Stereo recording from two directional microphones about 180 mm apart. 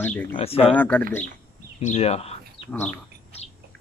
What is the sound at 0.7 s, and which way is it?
Speech, 10° left (ahead or behind).